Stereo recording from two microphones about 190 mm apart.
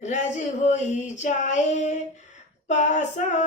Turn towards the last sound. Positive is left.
turn(degrees=40)  # may be behind; listen again after turning